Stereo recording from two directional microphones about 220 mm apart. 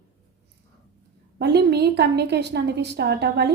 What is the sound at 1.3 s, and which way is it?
A woman's voice, 50° right (ahead or behind).